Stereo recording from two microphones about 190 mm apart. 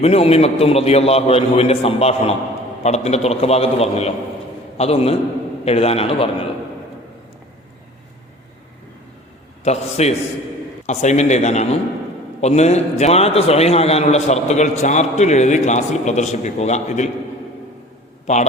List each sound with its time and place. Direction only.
0.0 s a man's voice: 30° left (ahead or behind)
9.6 s a man's voice: 35° left (ahead or behind)
18.3 s a man's voice: 35° left (ahead or behind)